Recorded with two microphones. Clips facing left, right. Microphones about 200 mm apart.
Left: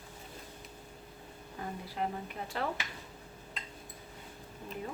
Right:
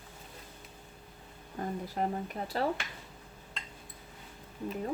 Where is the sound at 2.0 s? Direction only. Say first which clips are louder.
Right 2 dB; 45° right (ahead or behind).